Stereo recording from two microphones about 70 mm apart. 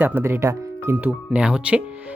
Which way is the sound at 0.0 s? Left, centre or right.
Right.